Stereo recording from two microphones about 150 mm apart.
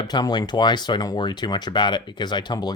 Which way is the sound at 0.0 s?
30° left (ahead or behind).